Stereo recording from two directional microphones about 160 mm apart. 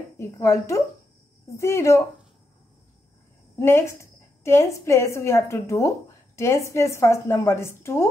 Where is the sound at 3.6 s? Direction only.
15° left (ahead or behind).